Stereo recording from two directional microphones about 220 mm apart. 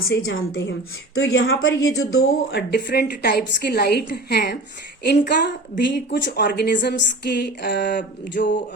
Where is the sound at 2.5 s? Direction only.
45° left (ahead or behind).